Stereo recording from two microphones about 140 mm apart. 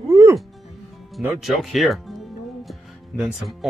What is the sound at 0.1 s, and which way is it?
Music, 20° right (ahead or behind).